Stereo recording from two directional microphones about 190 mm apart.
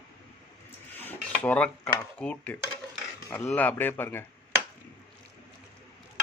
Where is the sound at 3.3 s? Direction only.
5° left (ahead or behind).